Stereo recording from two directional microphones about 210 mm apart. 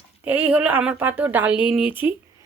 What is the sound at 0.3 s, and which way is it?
Speech, 5° right (ahead or behind).